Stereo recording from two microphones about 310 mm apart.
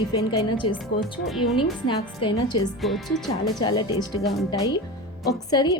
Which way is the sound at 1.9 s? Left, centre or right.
Centre.